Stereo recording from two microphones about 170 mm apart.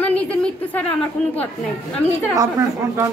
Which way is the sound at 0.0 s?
10° left (ahead or behind).